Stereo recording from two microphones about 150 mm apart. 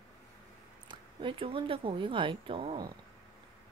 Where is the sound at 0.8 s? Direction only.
35° right (ahead or behind).